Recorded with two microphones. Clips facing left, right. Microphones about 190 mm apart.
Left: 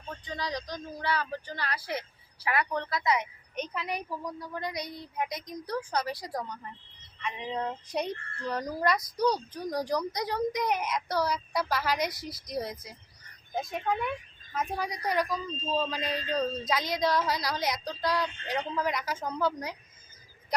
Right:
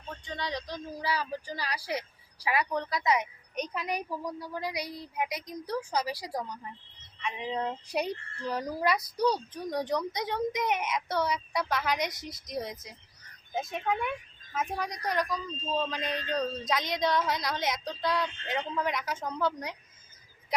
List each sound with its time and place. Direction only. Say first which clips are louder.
0.1 s speech: left 1 dB; centre (ahead or behind)
9.0 s speech: even; 30° right (ahead or behind)
9.6 s a man's voice: even; centre (ahead or behind)